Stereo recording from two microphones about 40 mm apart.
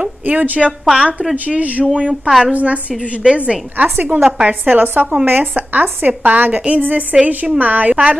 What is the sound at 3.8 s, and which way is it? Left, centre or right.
Speech, right.